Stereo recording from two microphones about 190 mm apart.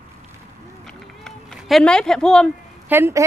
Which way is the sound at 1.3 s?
Centre (ahead or behind).